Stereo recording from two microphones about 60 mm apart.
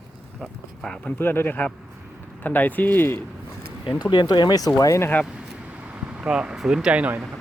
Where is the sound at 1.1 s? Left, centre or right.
Left.